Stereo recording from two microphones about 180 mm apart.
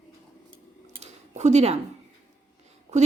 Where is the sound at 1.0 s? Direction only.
40° right (ahead or behind).